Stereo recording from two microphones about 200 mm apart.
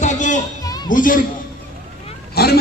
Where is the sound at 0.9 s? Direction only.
40° left (ahead or behind).